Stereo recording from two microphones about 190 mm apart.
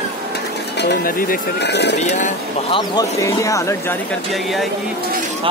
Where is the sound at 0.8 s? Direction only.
55° left (ahead or behind).